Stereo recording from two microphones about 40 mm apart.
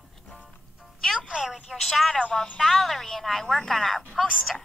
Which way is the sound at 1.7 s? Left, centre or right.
Centre.